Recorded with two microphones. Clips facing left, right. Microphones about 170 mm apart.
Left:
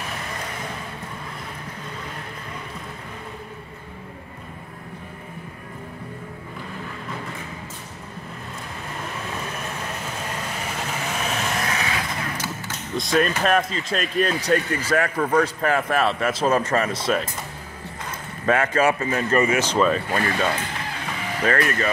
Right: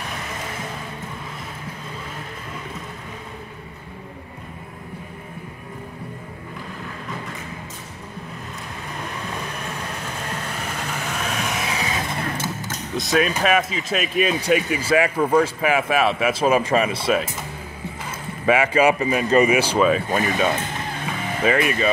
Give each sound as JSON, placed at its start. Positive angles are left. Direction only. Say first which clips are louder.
{"t": 11.2, "sound": "vehicle", "louder": "even", "side_deg": 0}
{"t": 11.7, "sound": "vehicle", "louder": "right 1 dB", "side_deg": -20}
{"t": 12.9, "sound": "speech", "louder": "even", "side_deg": 0}
{"t": 18.4, "sound": "speech", "louder": "right 3 dB", "side_deg": -10}